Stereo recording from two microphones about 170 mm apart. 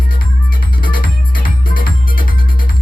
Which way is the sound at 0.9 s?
55° left (ahead or behind).